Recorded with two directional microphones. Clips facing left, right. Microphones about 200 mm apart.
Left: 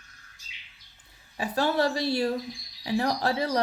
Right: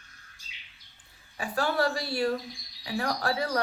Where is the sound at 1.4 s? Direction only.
20° left (ahead or behind).